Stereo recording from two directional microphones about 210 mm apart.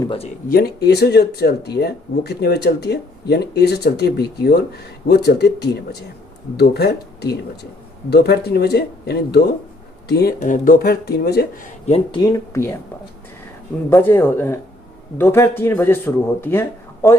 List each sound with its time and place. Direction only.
0.0 s speech: 25° left (ahead or behind)
0.4 s speech: 45° left (ahead or behind)
11.9 s speech: 30° left (ahead or behind)
12.2 s speech: 15° left (ahead or behind)
13.9 s speech: 10° left (ahead or behind)